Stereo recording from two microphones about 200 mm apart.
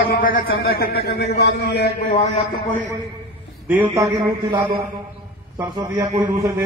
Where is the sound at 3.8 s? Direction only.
15° right (ahead or behind).